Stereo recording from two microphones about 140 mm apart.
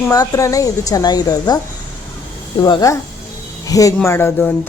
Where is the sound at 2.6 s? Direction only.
25° left (ahead or behind).